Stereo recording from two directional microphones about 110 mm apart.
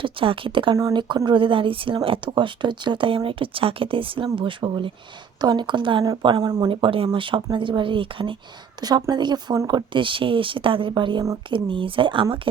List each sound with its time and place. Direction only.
0.0 s speech: 50° right (ahead or behind); by 6.7 s 35° right (ahead or behind)
6.7 s speech: 55° right (ahead or behind)
8.8 s speech: 35° right (ahead or behind)